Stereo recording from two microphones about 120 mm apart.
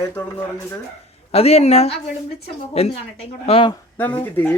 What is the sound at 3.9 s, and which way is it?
Speech, 15° left (ahead or behind).